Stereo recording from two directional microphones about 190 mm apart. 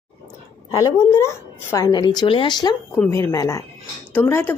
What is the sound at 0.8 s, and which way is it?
A woman's voice, 15° left (ahead or behind).